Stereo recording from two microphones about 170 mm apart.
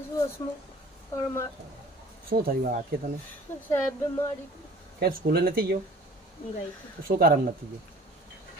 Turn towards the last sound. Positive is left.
turn(degrees=-60)  # may be behind; listen again after turning